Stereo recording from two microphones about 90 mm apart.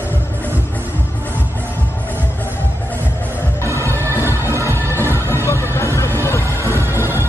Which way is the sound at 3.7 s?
30° right (ahead or behind).